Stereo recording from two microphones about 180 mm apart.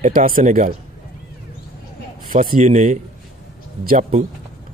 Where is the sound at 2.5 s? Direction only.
40° right (ahead or behind).